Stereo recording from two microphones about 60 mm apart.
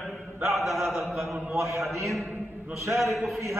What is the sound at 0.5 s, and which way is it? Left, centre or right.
Chant, centre.